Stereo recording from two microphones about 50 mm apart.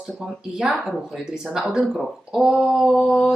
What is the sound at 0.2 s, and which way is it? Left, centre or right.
Speech, centre.